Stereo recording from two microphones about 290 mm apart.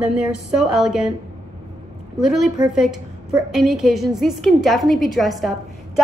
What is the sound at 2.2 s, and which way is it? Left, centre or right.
A woman's voice, centre.